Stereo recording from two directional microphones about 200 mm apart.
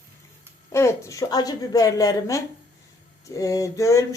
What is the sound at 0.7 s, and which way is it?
A woman's voice, 15° left (ahead or behind).